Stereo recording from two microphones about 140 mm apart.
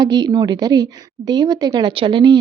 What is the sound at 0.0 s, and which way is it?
Speech, 30° right (ahead or behind).